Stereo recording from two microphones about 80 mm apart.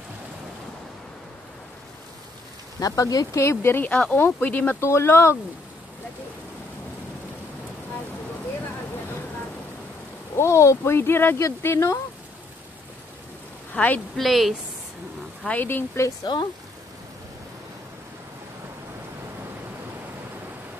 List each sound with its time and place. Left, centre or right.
2.8 s speech: left
3.9 s speech: centre; by 5.4 s left
10.3 s speech: left
13.7 s speech: centre
14.1 s a woman's voice: centre
15.4 s speech: left
16.3 s speech: left